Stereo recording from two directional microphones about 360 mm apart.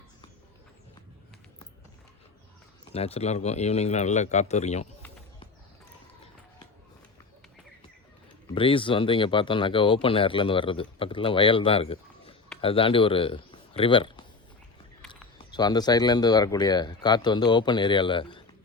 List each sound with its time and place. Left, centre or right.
2.9 s a man's voice: centre
8.5 s speech: centre